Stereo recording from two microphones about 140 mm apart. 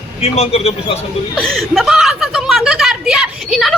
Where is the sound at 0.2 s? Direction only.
45° left (ahead or behind).